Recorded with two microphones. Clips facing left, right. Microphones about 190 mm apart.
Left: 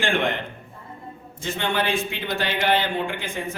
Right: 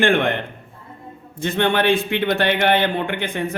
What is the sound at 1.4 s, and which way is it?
A man's voice, 60° right (ahead or behind).